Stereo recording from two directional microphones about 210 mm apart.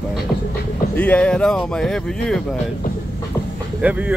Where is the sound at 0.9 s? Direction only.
5° left (ahead or behind).